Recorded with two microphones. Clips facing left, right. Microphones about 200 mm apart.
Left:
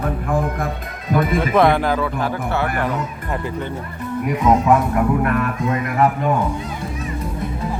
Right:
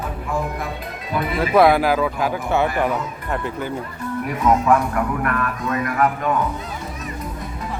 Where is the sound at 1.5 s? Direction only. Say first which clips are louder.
Right 2 dB; 5° right (ahead or behind).